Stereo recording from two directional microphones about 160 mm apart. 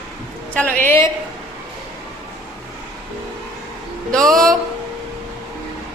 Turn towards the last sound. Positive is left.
turn(degrees=5)  # may be behind; listen again after turning